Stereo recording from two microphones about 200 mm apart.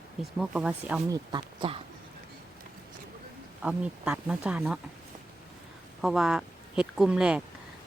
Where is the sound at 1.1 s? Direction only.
20° right (ahead or behind).